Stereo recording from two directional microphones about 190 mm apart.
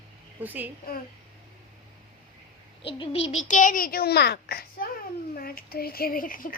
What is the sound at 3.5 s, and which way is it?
A child's voice, 45° left (ahead or behind).